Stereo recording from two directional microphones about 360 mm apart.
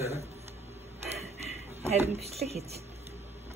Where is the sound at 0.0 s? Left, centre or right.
Centre.